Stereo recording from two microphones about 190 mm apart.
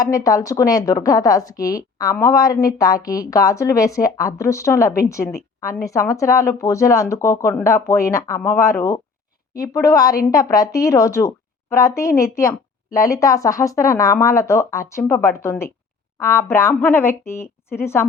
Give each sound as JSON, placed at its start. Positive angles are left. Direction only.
{"t": 0.0, "sound": "a woman's voice", "side_deg": 20}